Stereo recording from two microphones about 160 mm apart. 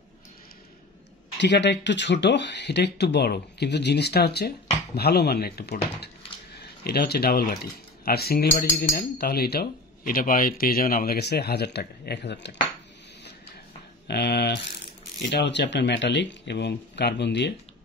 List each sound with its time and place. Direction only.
1.4 s speech: 90° left
14.0 s speech: 90° left